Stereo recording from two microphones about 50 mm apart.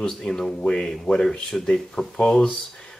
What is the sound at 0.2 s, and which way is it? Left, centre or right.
Speech, centre.